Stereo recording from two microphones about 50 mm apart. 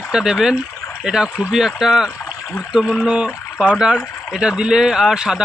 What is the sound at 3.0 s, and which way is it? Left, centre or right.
Speech, centre.